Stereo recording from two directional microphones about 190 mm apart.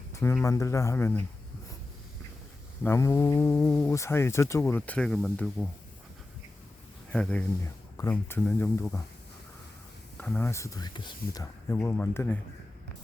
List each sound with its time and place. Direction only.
0.1 s a sound: 15° left (ahead or behind)
0.4 s speech: 15° left (ahead or behind)
2.8 s speech: 15° left (ahead or behind)
7.1 s speech: 5° left (ahead or behind)
10.2 s speech: 10° left (ahead or behind)
11.7 s speech: 10° left (ahead or behind)